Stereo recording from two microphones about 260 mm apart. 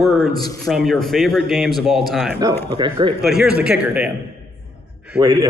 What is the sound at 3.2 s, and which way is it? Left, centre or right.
Speech, centre.